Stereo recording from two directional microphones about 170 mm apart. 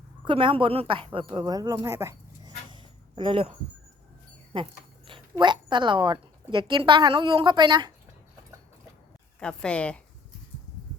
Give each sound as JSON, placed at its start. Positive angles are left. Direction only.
{"t": 0.3, "sound": "speech", "side_deg": -30}
{"t": 2.6, "sound": "a sound", "side_deg": -25}
{"t": 4.5, "sound": "dog", "side_deg": -30}
{"t": 5.3, "sound": "speech", "side_deg": -25}
{"t": 9.4, "sound": "a woman's voice", "side_deg": 5}